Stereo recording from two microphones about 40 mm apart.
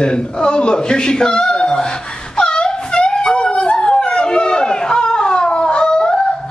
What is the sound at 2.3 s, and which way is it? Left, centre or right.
Wail, left.